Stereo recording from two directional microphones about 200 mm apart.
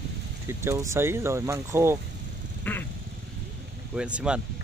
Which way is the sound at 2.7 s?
10° left (ahead or behind).